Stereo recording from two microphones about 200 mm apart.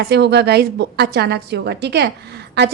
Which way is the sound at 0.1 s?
55° right (ahead or behind).